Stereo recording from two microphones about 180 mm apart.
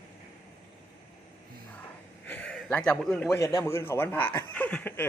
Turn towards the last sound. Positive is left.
turn(degrees=10)  # may be behind; listen again after turning